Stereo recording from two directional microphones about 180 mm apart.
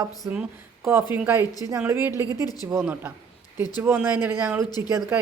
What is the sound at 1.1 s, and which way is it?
Speech, 10° right (ahead or behind).